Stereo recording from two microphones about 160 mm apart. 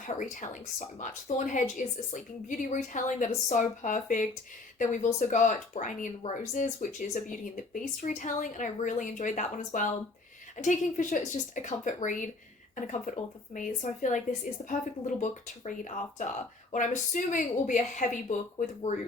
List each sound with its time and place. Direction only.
0.0 s speech: 50° left (ahead or behind)